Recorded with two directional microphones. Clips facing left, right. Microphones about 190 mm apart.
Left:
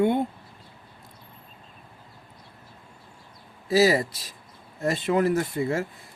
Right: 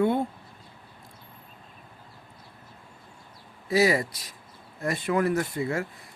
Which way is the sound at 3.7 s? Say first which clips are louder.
Left 3 dB; 30° left (ahead or behind).